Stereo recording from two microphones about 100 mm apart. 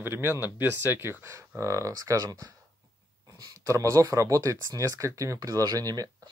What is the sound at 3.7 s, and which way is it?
Speech, 35° right (ahead or behind).